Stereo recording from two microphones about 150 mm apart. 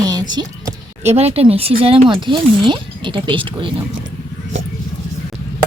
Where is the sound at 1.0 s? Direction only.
45° right (ahead or behind).